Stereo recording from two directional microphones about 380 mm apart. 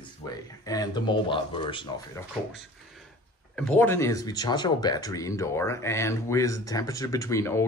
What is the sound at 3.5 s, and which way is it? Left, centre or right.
Speech, centre.